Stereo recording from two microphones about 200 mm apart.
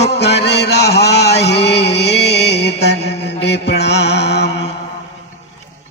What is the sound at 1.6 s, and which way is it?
Music, 60° left (ahead or behind).